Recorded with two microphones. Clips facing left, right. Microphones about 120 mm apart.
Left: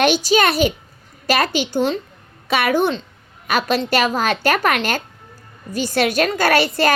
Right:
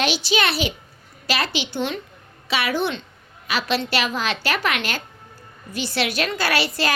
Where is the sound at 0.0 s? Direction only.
45° left (ahead or behind).